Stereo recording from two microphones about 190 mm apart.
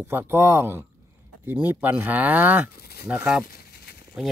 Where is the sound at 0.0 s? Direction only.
10° right (ahead or behind).